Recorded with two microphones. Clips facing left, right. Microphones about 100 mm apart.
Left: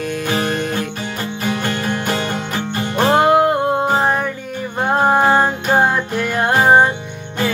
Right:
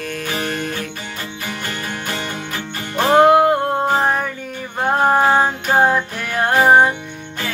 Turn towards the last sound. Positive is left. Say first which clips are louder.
# even
turn(degrees=0)  # may be behind; listen again after turning